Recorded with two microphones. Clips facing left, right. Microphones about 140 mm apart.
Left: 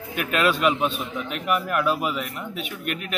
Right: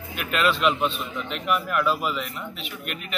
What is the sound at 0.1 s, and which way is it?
Speech, 50° left (ahead or behind).